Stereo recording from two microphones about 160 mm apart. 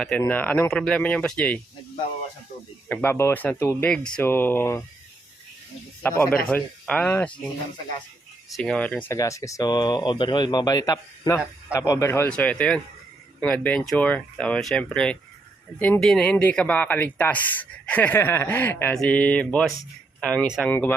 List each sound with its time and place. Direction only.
0.2 s speech: 10° left (ahead or behind)
2.9 s speech: 15° left (ahead or behind)
6.0 s speech: 15° left (ahead or behind)
8.4 s speech: centre (ahead or behind)